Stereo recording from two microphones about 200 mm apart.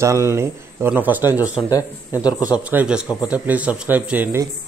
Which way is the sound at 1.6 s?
20° left (ahead or behind).